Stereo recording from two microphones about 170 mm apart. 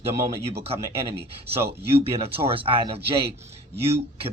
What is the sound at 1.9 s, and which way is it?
Speech, 35° right (ahead or behind).